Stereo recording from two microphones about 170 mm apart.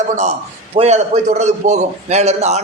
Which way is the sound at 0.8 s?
40° right (ahead or behind).